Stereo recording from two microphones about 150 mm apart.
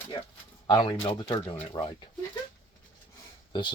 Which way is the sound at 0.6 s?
30° left (ahead or behind).